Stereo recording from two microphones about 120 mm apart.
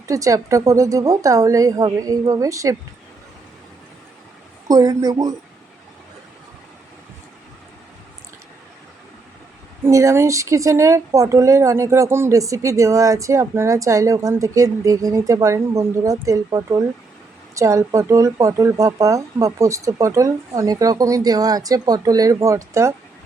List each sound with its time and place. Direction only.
0.1 s speech: 30° right (ahead or behind)
4.7 s a woman's voice: 30° right (ahead or behind)
9.8 s speech: 25° right (ahead or behind)